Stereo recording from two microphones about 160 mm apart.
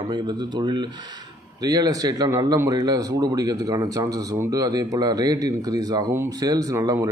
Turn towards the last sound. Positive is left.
turn(degrees=-20)  # may be behind; listen again after turning